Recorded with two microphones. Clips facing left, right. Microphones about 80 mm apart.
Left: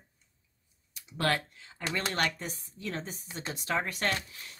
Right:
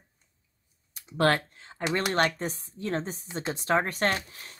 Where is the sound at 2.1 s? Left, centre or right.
Right.